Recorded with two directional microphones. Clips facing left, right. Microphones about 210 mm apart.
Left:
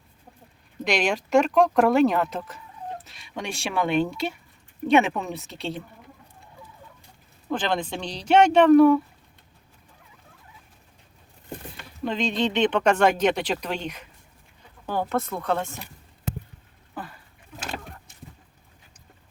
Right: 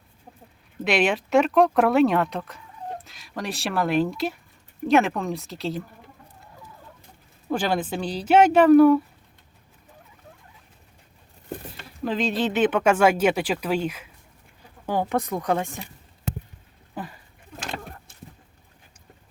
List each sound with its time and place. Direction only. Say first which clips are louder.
0.9 s speech: right 2 dB; 5° right (ahead or behind)
7.5 s speech: right 2 dB; 10° right (ahead or behind)
12.0 s speech: right 1 dB; 5° right (ahead or behind)